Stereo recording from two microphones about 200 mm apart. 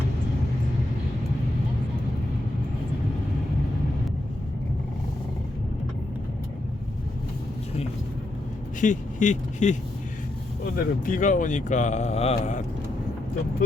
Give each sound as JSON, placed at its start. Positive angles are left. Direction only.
{"t": 8.8, "sound": "speech", "side_deg": 40}
{"t": 10.8, "sound": "speech", "side_deg": 40}